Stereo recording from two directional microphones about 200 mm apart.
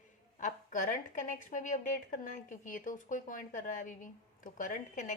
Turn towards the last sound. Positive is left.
turn(degrees=40)  # may be behind; listen again after turning